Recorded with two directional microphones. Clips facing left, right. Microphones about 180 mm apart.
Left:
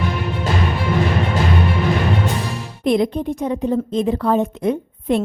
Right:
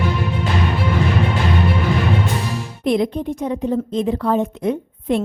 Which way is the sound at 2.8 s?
45° left (ahead or behind).